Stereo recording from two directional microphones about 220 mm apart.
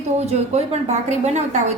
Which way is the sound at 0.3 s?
30° right (ahead or behind).